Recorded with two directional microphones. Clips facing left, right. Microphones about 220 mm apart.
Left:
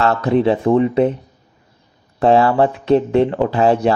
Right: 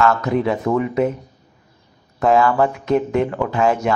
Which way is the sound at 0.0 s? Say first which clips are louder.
Left 3 dB; 30° left (ahead or behind).